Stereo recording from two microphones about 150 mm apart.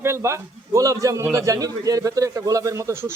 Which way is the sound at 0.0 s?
20° right (ahead or behind).